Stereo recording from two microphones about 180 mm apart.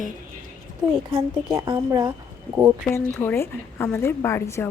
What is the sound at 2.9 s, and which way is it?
Speech, 15° left (ahead or behind).